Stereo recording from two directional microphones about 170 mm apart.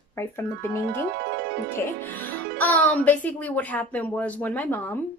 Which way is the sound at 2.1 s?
10° left (ahead or behind).